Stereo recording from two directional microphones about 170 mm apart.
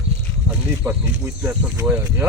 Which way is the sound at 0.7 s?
10° right (ahead or behind).